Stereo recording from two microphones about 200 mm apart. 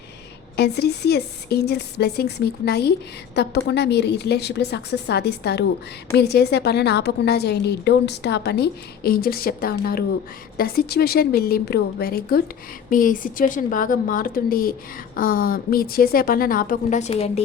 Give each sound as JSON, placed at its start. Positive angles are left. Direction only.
{"t": 0.5, "sound": "a woman's voice", "side_deg": 55}